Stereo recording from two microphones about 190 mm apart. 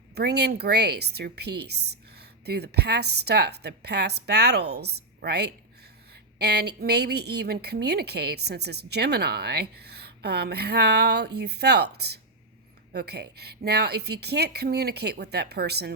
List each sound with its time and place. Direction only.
0.1 s a woman's voice: 60° right (ahead or behind)